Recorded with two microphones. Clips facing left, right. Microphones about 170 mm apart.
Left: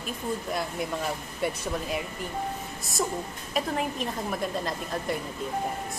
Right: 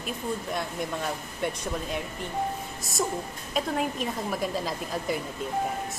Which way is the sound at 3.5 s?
Centre (ahead or behind).